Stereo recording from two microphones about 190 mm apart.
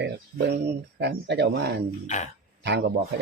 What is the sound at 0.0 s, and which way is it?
Speech, 65° right (ahead or behind).